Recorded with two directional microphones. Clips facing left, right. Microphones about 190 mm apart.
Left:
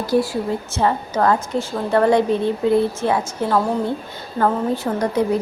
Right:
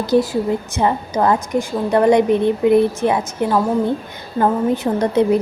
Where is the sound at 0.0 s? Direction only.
20° right (ahead or behind).